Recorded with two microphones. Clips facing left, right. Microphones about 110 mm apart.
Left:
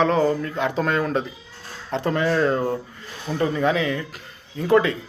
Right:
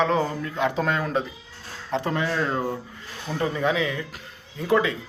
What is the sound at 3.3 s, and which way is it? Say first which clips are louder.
Speech: left 4 dB; 15° left (ahead or behind).